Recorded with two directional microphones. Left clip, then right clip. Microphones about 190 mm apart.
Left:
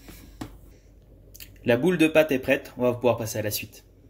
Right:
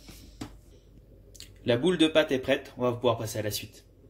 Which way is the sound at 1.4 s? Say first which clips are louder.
Left 4 dB; 30° left (ahead or behind).